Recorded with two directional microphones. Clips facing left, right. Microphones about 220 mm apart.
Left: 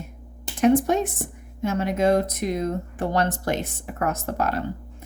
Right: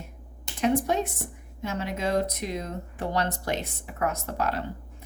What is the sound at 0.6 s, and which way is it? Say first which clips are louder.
A woman's voice: left 6 dB; 45° left (ahead or behind).